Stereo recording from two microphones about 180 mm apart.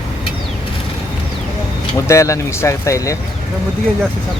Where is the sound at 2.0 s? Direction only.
15° left (ahead or behind).